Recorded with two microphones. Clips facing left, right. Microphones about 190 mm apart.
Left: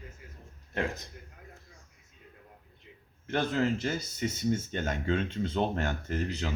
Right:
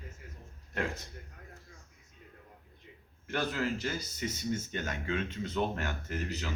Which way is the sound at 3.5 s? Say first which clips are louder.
Left 5 dB; 25° left (ahead or behind).